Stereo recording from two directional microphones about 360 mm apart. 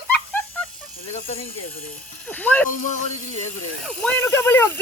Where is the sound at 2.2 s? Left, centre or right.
Centre.